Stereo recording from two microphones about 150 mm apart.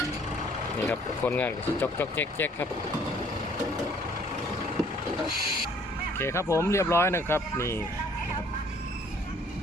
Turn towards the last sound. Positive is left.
turn(degrees=15)  # may be behind; listen again after turning